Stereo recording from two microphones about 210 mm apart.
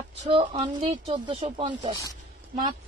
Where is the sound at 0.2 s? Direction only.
25° right (ahead or behind).